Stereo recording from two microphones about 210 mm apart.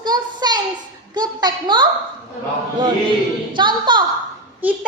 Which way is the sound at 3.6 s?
20° right (ahead or behind).